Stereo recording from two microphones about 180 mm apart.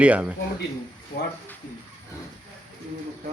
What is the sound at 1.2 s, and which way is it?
Speech, 60° left (ahead or behind).